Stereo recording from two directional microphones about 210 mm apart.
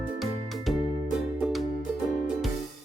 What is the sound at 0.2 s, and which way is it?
Music, centre (ahead or behind).